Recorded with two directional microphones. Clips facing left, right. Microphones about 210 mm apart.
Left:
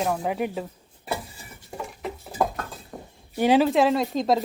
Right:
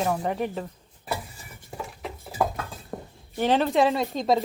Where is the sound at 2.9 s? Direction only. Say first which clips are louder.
Right 5 dB; 60° right (ahead or behind).